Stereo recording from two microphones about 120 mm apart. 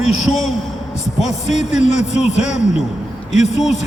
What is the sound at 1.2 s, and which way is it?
A man's voice, 70° left (ahead or behind).